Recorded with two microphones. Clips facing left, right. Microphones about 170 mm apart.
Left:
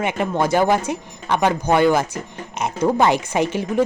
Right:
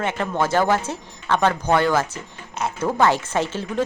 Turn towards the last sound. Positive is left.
turn(degrees=15)  # may be behind; listen again after turning